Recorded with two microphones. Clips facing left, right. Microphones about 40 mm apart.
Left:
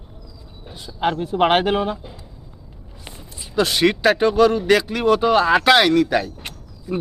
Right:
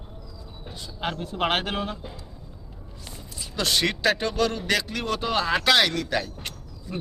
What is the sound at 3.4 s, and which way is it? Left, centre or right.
Speech, centre.